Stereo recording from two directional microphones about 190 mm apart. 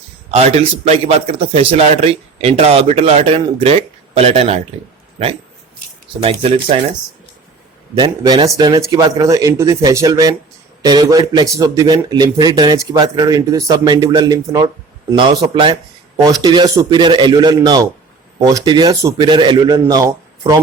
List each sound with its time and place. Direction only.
0.3 s a man's voice: 35° right (ahead or behind)
6.2 s a man's voice: 30° right (ahead or behind)
7.9 s a man's voice: 20° right (ahead or behind)